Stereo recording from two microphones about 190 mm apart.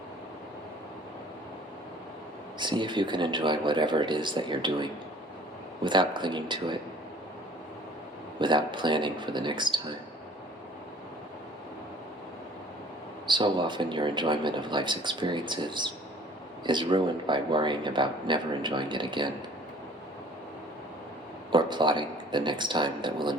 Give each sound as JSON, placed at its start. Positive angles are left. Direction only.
{"t": 2.6, "sound": "speech", "side_deg": -25}
{"t": 8.4, "sound": "speech", "side_deg": -25}
{"t": 13.2, "sound": "speech", "side_deg": -25}
{"t": 21.5, "sound": "speech", "side_deg": -25}